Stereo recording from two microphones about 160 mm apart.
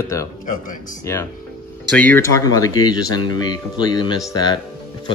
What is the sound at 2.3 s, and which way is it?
Speech, 20° left (ahead or behind).